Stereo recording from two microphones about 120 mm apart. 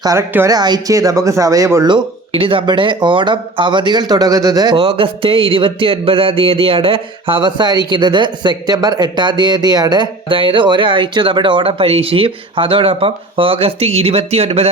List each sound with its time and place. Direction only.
0.0 s speech: 30° right (ahead or behind)
1.9 s speech: 50° right (ahead or behind)
4.8 s a sound: 50° right (ahead or behind)